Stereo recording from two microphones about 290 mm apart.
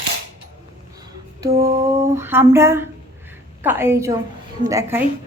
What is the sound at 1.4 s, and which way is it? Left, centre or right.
A woman's voice, centre.